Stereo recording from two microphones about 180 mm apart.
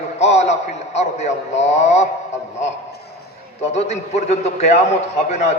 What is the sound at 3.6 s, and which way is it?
A man's voice, 35° left (ahead or behind).